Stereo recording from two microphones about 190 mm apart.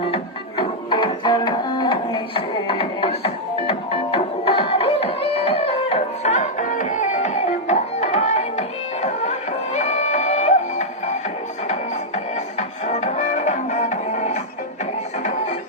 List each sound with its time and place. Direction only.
0.1 s music: 25° left (ahead or behind)